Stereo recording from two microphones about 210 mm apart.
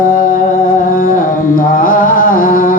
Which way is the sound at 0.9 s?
40° left (ahead or behind).